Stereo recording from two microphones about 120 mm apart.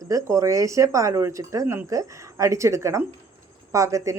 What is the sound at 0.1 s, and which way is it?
A woman's voice, 25° right (ahead or behind).